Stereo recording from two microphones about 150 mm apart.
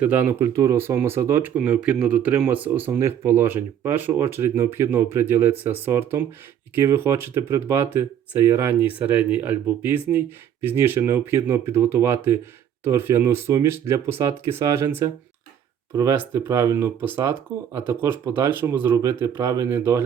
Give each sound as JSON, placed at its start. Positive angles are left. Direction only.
{"t": 0.0, "sound": "speech", "side_deg": -10}